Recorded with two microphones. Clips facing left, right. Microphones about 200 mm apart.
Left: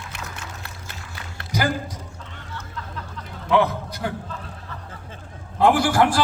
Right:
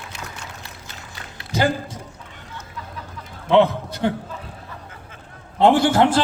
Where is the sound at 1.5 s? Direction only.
25° right (ahead or behind).